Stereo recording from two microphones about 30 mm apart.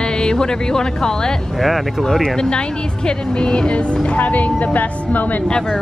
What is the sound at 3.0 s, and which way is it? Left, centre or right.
Speech, left.